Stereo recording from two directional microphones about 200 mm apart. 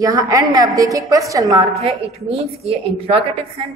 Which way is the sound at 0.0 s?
15° right (ahead or behind).